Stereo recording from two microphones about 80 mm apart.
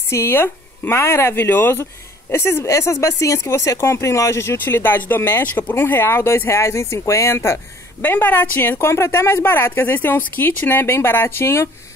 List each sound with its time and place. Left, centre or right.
0.1 s speech: left